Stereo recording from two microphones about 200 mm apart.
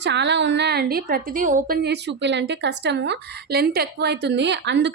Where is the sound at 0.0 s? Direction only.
60° right (ahead or behind).